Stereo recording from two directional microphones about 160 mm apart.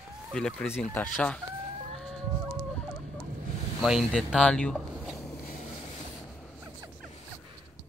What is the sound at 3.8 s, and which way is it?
Speech, centre (ahead or behind).